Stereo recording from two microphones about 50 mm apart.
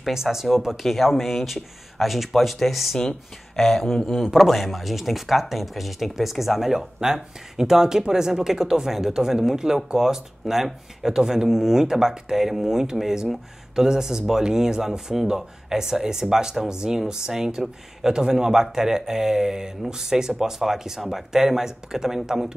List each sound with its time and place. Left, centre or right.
0.1 s speech: centre
3.0 s speech: centre